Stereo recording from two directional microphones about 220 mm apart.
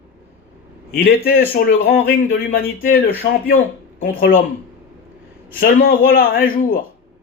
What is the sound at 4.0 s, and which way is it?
Speech, 40° left (ahead or behind).